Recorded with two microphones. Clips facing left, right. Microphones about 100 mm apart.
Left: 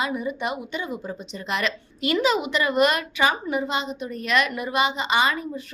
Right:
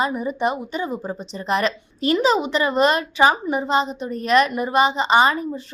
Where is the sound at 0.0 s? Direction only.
35° right (ahead or behind).